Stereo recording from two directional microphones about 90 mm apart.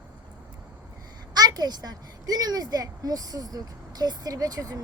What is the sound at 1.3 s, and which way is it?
A woman's voice, 45° right (ahead or behind).